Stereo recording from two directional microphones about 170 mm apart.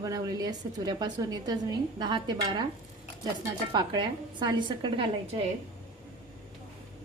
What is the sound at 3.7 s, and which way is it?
A woman's voice, 25° right (ahead or behind).